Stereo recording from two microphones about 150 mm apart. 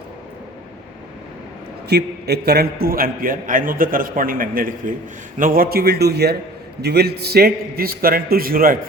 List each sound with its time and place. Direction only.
1.9 s a man's voice: 90° right; by 8.8 s 75° right (ahead or behind)